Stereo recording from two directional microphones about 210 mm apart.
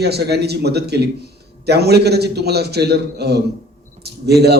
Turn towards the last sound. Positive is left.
turn(degrees=-50)  # may be behind; listen again after turning